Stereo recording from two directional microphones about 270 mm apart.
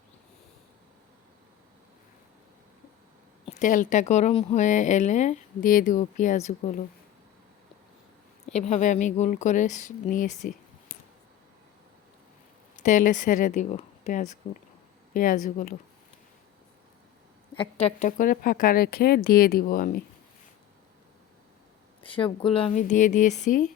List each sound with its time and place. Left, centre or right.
3.4 s speech: left
8.4 s speech: left
12.7 s speech: left
17.5 s speech: left
22.0 s speech: centre